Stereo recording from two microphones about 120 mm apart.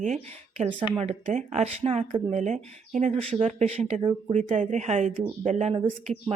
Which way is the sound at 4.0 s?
40° right (ahead or behind).